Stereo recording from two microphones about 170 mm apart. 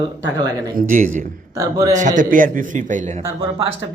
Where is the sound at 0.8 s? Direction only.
50° right (ahead or behind).